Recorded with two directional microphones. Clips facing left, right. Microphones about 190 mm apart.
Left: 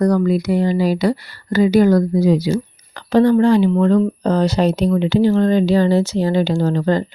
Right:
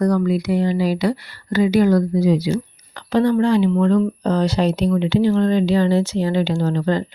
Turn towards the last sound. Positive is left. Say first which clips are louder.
# left 3 dB
turn(degrees=45)  # may be behind; listen again after turning